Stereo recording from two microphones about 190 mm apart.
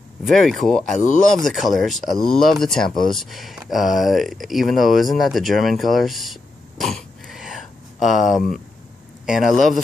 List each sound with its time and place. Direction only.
0.3 s speech: centre (ahead or behind)
0.9 s speech: 40° left (ahead or behind)
1.3 s speech: centre (ahead or behind)